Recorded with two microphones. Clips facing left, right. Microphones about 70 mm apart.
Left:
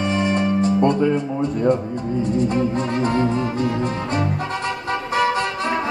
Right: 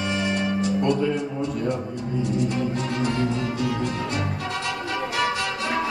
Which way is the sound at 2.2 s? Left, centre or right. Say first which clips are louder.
Left 5 dB; left.